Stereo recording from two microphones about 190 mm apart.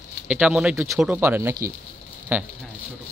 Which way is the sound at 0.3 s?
5° right (ahead or behind).